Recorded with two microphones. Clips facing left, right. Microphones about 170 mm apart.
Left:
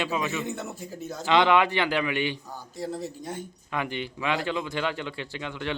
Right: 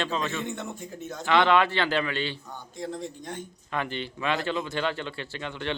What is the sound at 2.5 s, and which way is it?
Speech, 5° left (ahead or behind).